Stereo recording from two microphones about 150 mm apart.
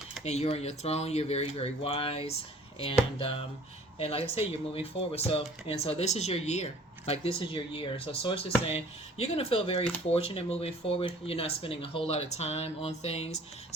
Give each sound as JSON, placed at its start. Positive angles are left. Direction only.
{"t": 0.3, "sound": "speech", "side_deg": 45}